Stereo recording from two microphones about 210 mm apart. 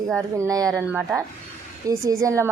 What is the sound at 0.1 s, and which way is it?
Speech, 15° right (ahead or behind).